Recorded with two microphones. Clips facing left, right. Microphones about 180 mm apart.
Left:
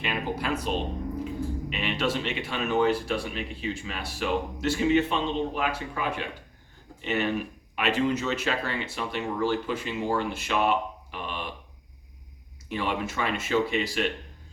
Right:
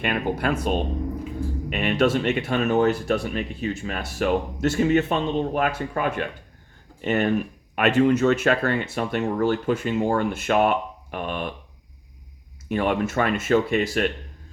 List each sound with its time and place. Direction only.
0.0 s speech: 55° right (ahead or behind)
12.6 s speech: 50° right (ahead or behind)